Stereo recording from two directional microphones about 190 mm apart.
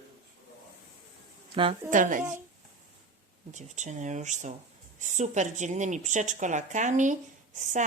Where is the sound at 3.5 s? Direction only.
40° right (ahead or behind).